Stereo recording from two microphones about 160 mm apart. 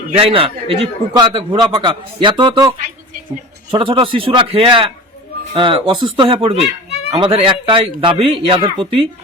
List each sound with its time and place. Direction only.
0.2 s a man's voice: 35° right (ahead or behind)